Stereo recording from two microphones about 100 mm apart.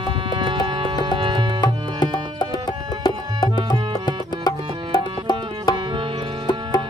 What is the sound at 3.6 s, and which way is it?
Tabla, 45° left (ahead or behind).